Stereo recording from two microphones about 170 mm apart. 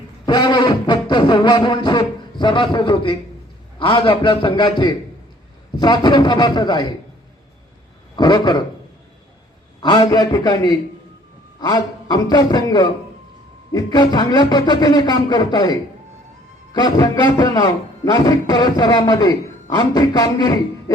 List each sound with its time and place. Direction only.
0.3 s music: 25° left (ahead or behind)
3.8 s a man's voice: 30° left (ahead or behind)
8.1 s speech: 25° left (ahead or behind)
9.8 s a man's voice: 25° left (ahead or behind)